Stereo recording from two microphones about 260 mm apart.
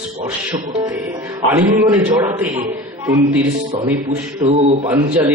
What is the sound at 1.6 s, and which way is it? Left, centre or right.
Speech, centre.